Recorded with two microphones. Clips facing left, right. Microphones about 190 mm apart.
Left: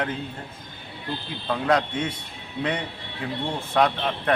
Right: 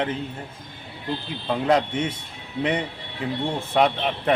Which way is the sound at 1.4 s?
25° right (ahead or behind).